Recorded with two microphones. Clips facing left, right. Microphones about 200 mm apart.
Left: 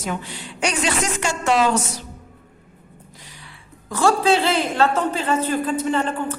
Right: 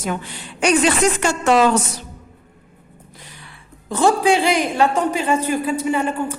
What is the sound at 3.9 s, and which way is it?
A man's voice, 20° right (ahead or behind).